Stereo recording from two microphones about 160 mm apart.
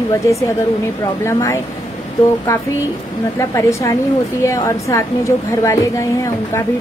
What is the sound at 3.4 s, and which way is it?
A woman's voice, 20° left (ahead or behind).